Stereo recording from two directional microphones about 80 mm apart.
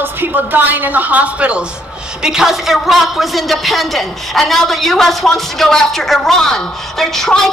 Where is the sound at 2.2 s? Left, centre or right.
Centre.